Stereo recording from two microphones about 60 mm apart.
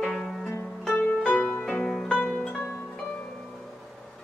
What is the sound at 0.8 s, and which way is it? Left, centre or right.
Music, left.